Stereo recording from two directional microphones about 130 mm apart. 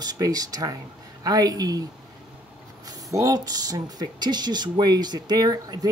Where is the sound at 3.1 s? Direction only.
25° right (ahead or behind).